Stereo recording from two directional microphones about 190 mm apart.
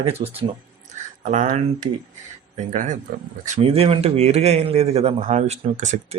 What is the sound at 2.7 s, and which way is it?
A man's voice, 40° right (ahead or behind).